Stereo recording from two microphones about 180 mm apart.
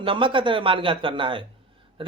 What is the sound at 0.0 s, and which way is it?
Speech, 30° right (ahead or behind).